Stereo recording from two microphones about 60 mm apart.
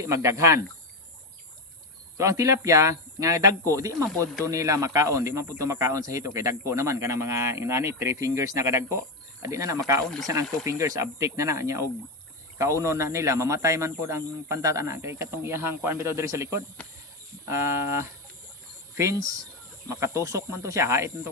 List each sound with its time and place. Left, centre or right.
0.0 s speech: right
2.1 s speech: right
10.0 s speech: centre
10.7 s speech: right
11.3 s speech: right